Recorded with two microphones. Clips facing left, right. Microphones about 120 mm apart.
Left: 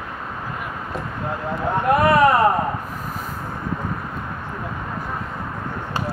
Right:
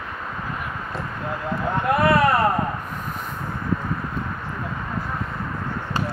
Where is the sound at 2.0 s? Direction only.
25° left (ahead or behind).